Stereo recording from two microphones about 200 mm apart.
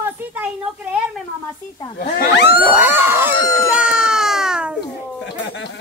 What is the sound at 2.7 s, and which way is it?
Screaming, 10° right (ahead or behind).